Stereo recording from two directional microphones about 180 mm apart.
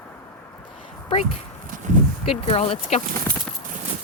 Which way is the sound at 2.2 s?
35° left (ahead or behind).